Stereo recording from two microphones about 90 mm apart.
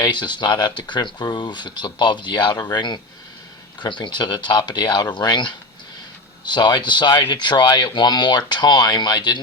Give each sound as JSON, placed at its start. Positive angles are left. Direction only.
{"t": 0.0, "sound": "speech", "side_deg": 55}